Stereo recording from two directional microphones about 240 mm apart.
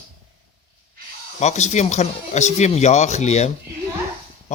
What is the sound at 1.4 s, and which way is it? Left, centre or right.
A man's voice, left.